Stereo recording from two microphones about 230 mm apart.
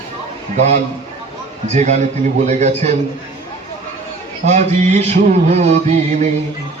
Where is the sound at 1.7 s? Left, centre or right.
Right.